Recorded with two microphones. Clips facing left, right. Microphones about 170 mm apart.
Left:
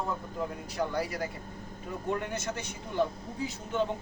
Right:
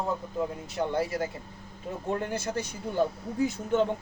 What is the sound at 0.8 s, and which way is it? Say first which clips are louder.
Speech: right 3 dB; 25° right (ahead or behind).